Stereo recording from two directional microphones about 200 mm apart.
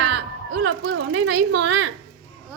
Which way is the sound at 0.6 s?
70° right (ahead or behind).